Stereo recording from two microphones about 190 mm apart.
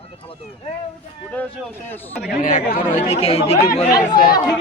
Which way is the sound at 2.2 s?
45° left (ahead or behind).